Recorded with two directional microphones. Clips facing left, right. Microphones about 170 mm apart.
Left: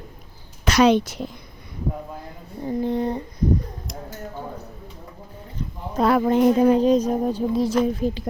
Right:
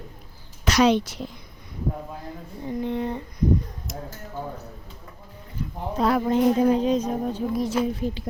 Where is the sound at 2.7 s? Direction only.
35° left (ahead or behind).